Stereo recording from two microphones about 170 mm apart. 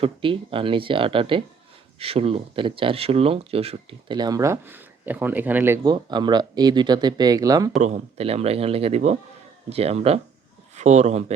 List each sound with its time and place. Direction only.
0.0 s speech: 30° right (ahead or behind); by 5.8 s 10° right (ahead or behind)
5.8 s speech: 25° right (ahead or behind)
7.8 s speech: 45° right (ahead or behind)